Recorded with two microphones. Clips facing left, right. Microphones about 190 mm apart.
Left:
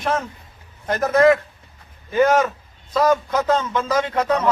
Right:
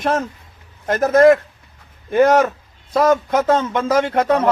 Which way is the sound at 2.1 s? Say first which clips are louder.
Right 3 dB; 65° right (ahead or behind).